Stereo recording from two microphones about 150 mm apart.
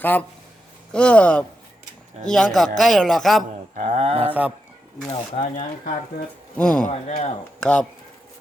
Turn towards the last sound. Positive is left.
turn(degrees=5)  # may be behind; listen again after turning